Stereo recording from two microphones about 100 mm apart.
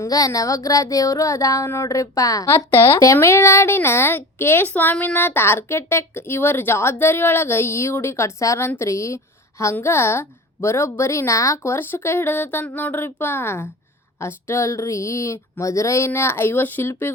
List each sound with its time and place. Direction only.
0.0 s child singing: 35° left (ahead or behind)
2.5 s speech: 25° left (ahead or behind)